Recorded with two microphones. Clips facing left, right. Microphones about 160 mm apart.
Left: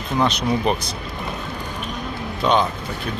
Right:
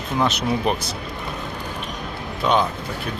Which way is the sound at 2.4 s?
5° right (ahead or behind).